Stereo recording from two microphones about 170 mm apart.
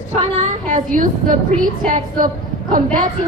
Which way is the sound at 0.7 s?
50° right (ahead or behind).